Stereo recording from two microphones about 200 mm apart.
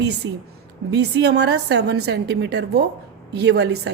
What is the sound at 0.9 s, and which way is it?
A woman's voice, 55° right (ahead or behind).